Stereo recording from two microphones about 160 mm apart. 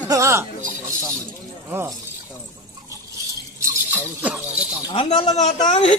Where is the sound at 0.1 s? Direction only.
20° right (ahead or behind).